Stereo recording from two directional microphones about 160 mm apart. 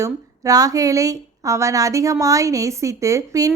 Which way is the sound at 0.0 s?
20° right (ahead or behind).